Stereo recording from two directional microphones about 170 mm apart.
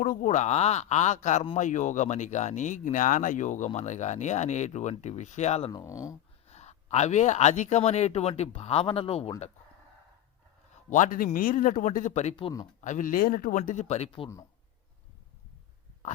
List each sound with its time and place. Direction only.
0.0 s speech: 50° left (ahead or behind)
5.7 s speech: 20° left (ahead or behind)
6.5 s speech: 40° left (ahead or behind)
10.8 s speech: 45° left (ahead or behind)
12.8 s speech: 50° left (ahead or behind)